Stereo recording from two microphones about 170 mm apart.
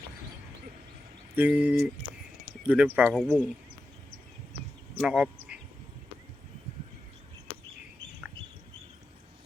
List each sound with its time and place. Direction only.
1.4 s speech: 5° right (ahead or behind)
4.9 s speech: 5° right (ahead or behind)